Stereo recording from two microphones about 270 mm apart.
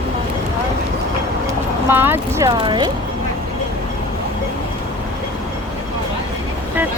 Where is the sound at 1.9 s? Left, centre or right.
Centre.